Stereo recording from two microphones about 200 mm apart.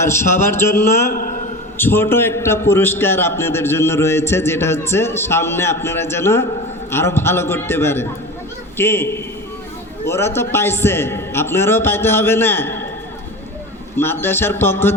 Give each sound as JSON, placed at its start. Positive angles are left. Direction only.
{"t": 0.0, "sound": "a man's voice", "side_deg": 15}
{"t": 1.1, "sound": "a man's voice", "side_deg": 45}
{"t": 1.8, "sound": "a man's voice", "side_deg": 10}
{"t": 13.9, "sound": "a man's voice", "side_deg": 10}